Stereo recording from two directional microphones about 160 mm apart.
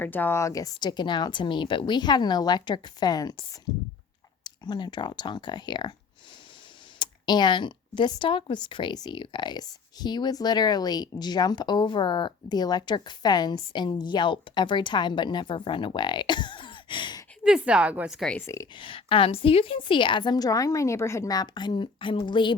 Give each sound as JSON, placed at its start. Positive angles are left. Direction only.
{"t": 0.0, "sound": "speech", "side_deg": 10}
{"t": 4.4, "sound": "speech", "side_deg": 25}
{"t": 7.0, "sound": "speech", "side_deg": 25}
{"t": 17.4, "sound": "a woman's voice", "side_deg": -5}
{"t": 18.4, "sound": "speech", "side_deg": 20}
{"t": 18.8, "sound": "speech", "side_deg": 35}